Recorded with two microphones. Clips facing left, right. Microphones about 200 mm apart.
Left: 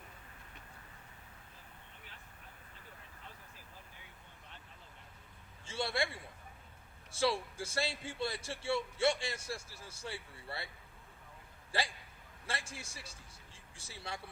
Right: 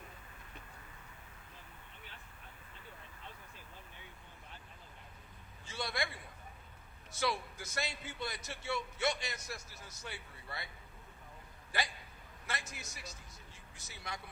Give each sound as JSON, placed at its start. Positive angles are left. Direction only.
{"t": 5.6, "sound": "a sound", "side_deg": 25}
{"t": 7.1, "sound": "a man's voice", "side_deg": 30}
{"t": 11.7, "sound": "a man's voice", "side_deg": 30}